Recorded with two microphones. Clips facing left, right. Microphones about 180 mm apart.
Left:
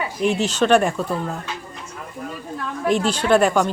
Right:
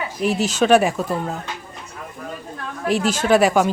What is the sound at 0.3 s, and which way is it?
Speech, 40° right (ahead or behind).